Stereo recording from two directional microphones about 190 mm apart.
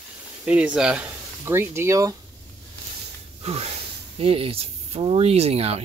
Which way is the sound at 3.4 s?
35° right (ahead or behind).